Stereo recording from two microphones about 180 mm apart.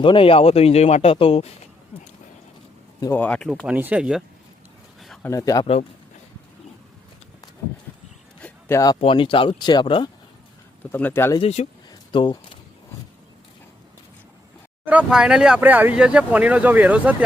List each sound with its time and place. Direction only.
0.0 s speech: 30° left (ahead or behind)
3.0 s speech: 10° left (ahead or behind)
3.7 s speech: 10° right (ahead or behind)
4.9 s a sound: centre (ahead or behind)
5.2 s speech: 20° left (ahead or behind)
8.4 s a sound: 10° left (ahead or behind)
9.0 s speech: 30° left (ahead or behind)
10.9 s speech: 10° left (ahead or behind)
11.3 s speech: 35° left (ahead or behind)
11.9 s a sound: 25° left (ahead or behind)
14.8 s speech: 5° right (ahead or behind)